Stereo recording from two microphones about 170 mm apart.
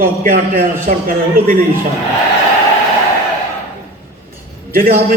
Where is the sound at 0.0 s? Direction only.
55° right (ahead or behind).